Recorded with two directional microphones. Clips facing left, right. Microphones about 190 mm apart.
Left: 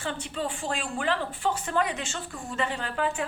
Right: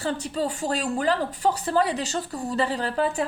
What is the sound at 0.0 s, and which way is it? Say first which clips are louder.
Speech: right 5 dB; 40° right (ahead or behind).